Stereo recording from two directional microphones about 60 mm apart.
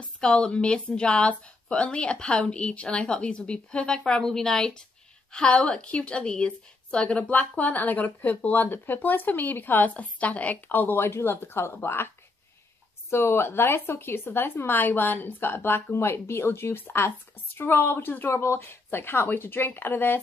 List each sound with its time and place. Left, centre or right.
0.2 s a woman's voice: centre; by 11.1 s left
11.1 s speech: left
13.1 s speech: left